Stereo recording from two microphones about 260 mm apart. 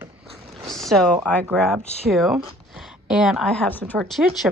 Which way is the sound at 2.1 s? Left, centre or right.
Centre.